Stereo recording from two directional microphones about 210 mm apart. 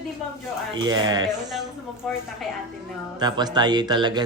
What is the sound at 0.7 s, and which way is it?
Speech, 20° right (ahead or behind).